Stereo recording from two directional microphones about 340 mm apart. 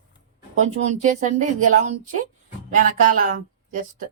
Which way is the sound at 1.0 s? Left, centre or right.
Right.